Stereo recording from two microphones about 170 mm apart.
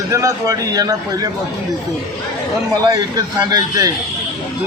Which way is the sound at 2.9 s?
20° right (ahead or behind).